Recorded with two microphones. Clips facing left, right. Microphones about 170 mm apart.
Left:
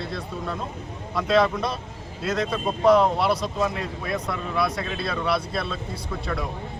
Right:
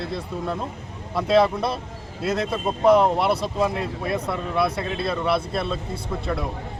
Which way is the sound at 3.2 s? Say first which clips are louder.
Right 2 dB; 25° right (ahead or behind).